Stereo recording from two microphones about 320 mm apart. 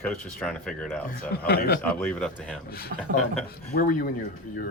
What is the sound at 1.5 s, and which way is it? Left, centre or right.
Speech, left.